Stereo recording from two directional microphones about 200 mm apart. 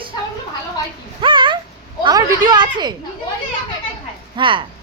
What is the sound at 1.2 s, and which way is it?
A woman's voice, 25° right (ahead or behind).